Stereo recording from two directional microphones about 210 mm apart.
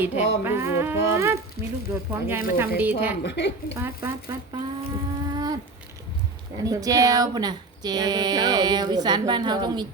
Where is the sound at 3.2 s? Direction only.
55° left (ahead or behind).